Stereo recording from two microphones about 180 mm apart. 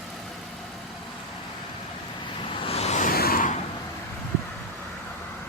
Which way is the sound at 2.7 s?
35° left (ahead or behind).